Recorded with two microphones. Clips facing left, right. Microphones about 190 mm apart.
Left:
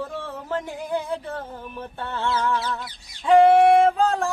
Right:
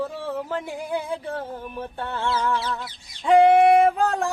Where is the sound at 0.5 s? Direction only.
10° right (ahead or behind).